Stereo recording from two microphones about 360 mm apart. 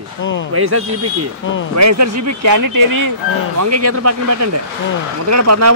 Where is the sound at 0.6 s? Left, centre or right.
Right.